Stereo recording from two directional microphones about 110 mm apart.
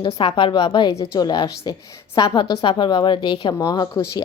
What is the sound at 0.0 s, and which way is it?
A woman's voice, 50° left (ahead or behind).